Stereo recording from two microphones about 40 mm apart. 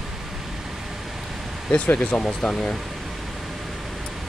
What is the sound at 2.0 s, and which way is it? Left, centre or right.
Speech, left.